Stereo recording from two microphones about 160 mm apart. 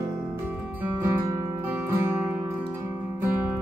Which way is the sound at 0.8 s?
15° right (ahead or behind).